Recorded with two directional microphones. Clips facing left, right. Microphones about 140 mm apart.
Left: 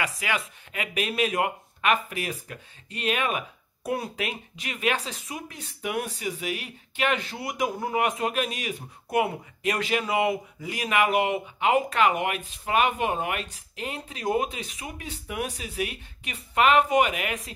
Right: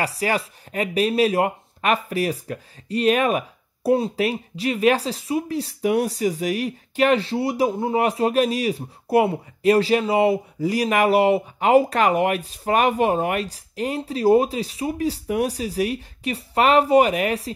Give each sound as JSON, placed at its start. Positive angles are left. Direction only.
{"t": 0.0, "sound": "speech", "side_deg": -35}